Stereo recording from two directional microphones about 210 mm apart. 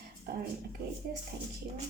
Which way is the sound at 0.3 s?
50° right (ahead or behind).